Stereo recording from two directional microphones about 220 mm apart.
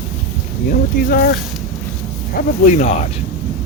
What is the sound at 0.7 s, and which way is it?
Speech, 40° left (ahead or behind).